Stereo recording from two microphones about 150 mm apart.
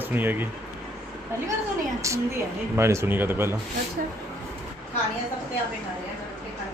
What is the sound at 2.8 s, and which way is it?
Speech, 15° right (ahead or behind).